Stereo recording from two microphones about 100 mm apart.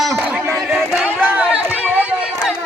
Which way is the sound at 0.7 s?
Centre (ahead or behind).